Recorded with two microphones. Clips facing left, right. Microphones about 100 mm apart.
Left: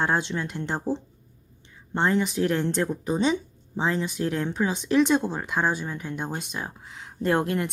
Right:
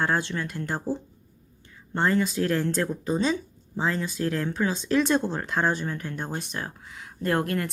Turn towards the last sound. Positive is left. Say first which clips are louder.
# left 2 dB
turn(degrees=20)  # may be behind; listen again after turning